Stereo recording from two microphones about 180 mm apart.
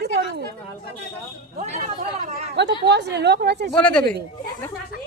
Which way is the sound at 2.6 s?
70° right (ahead or behind).